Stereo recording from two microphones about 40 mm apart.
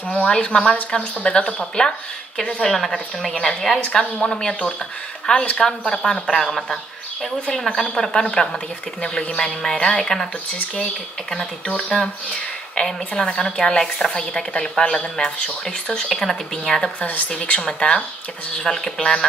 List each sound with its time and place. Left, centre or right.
0.1 s speech: left
2.6 s a woman's voice: centre
5.3 s speech: left
5.7 s a woman's voice: centre
7.5 s a woman's voice: centre
12.7 s a woman's voice: centre